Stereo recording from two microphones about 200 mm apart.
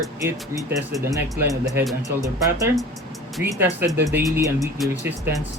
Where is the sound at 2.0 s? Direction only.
15° right (ahead or behind).